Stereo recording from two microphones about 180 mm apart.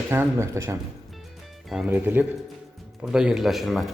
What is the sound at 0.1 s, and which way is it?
Speech, 15° right (ahead or behind).